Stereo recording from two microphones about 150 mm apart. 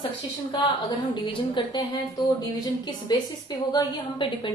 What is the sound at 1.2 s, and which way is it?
A woman's voice, 30° left (ahead or behind).